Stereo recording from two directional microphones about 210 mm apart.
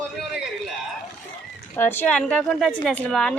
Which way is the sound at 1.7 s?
10° left (ahead or behind).